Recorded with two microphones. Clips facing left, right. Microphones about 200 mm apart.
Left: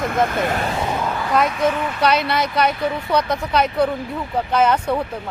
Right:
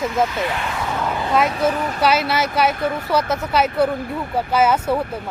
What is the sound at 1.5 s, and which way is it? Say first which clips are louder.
Speech: even; 35° right (ahead or behind).